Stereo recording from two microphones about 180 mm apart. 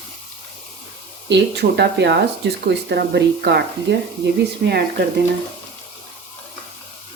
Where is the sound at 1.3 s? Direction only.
75° right (ahead or behind).